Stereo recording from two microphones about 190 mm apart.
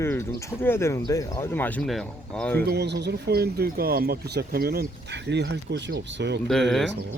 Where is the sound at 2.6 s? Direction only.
60° right (ahead or behind).